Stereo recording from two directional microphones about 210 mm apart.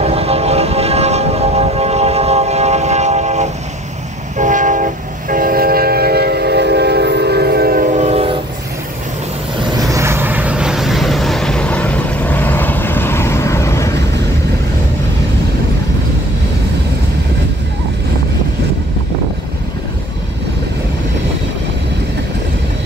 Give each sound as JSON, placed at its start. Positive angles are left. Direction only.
{"t": 0.0, "sound": "vehicle", "side_deg": -30}
{"t": 4.4, "sound": "train", "side_deg": -35}
{"t": 9.8, "sound": "vehicle", "side_deg": -15}